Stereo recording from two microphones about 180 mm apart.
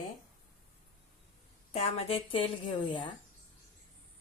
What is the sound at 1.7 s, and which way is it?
Speech, 35° left (ahead or behind).